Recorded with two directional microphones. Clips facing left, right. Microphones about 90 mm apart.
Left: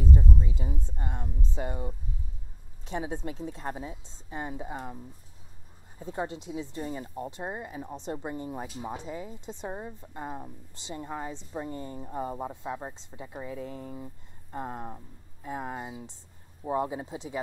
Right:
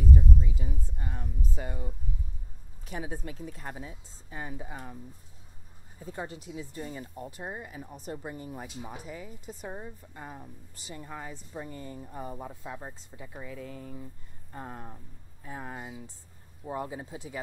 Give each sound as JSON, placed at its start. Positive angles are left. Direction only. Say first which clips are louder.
{"t": 0.0, "sound": "speech", "louder": "even", "side_deg": 30}
{"t": 5.9, "sound": "speech", "louder": "left 5 dB", "side_deg": 25}